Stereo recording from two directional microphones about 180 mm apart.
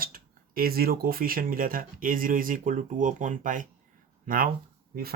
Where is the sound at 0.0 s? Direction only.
55° right (ahead or behind).